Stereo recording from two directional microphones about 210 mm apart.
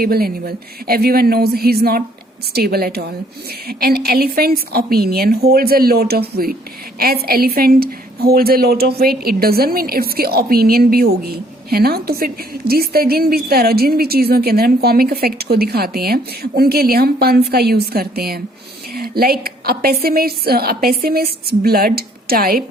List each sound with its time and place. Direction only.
0.0 s a woman's voice: 45° right (ahead or behind)